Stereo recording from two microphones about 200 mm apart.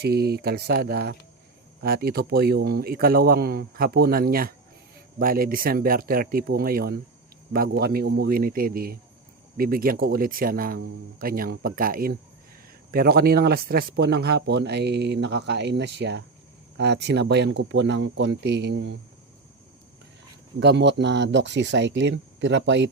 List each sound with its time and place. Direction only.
0.0 s speech: 50° right (ahead or behind)
20.6 s speech: 60° right (ahead or behind)